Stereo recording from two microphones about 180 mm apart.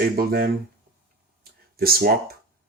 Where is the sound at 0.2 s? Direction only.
60° right (ahead or behind).